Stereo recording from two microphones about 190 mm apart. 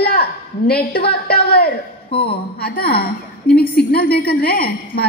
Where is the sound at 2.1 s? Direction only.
30° left (ahead or behind).